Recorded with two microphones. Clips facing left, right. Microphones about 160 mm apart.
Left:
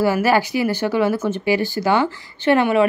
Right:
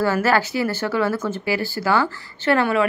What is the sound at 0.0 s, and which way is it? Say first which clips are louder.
Speech: left 2 dB; 15° left (ahead or behind).